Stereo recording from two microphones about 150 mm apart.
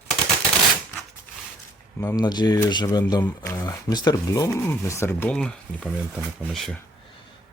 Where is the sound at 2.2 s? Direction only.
25° left (ahead or behind); by 5.9 s 5° left (ahead or behind).